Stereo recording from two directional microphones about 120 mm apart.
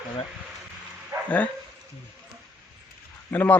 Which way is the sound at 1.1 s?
20° right (ahead or behind).